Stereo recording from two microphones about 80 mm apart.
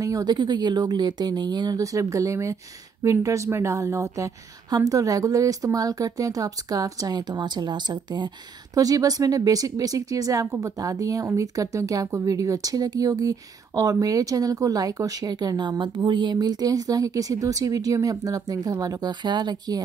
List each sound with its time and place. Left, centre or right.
0.0 s a sound: right
0.3 s speech: right
1.8 s speech: right
8.7 s speech: right